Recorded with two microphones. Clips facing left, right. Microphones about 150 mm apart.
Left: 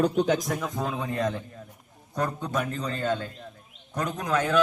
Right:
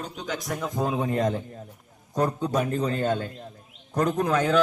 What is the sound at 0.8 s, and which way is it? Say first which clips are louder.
Speech: right 4 dB; 20° right (ahead or behind).